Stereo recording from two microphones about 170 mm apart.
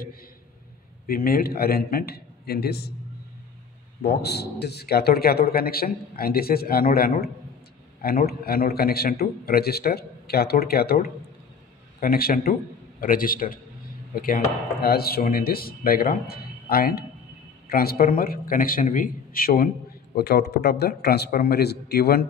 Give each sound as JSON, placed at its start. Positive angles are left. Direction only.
{"t": 1.0, "sound": "a man's voice", "side_deg": 60}
{"t": 4.0, "sound": "a man's voice", "side_deg": 70}